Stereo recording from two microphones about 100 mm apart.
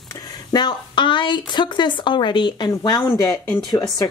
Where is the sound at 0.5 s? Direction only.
50° left (ahead or behind).